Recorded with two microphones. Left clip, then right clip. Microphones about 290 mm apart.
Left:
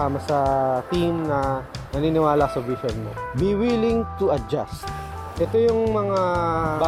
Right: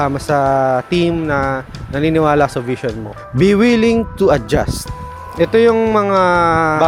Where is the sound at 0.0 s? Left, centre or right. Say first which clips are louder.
Right 7 dB; right.